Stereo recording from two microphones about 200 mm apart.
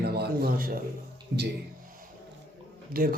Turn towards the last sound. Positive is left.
turn(degrees=-45)  # may be behind; listen again after turning